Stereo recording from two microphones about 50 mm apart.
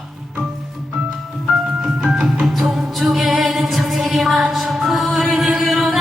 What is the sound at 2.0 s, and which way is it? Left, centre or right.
Music, centre.